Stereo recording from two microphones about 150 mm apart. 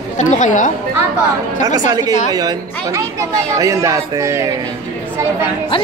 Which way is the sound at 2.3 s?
25° right (ahead or behind).